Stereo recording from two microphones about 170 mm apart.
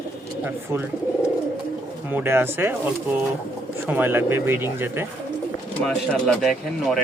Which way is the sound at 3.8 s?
10° right (ahead or behind).